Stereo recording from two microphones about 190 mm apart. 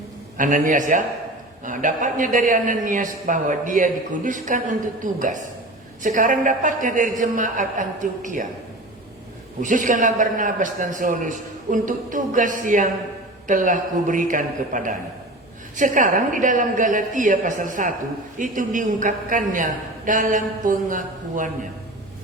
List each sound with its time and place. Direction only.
0.3 s a man's voice: 45° right (ahead or behind)
9.6 s a man's voice: 45° right (ahead or behind)